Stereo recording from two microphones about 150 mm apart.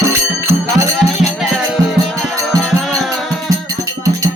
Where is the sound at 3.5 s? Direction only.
25° right (ahead or behind).